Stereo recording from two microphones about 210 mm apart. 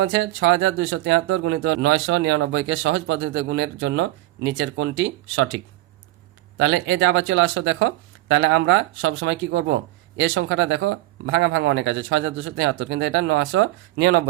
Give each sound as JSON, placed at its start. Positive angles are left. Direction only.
{"t": 0.0, "sound": "speech", "side_deg": -60}